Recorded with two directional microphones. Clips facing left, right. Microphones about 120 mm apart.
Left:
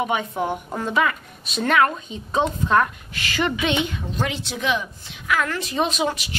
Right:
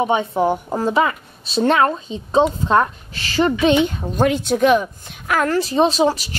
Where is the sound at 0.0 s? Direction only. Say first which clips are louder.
Right 6 dB; 30° right (ahead or behind).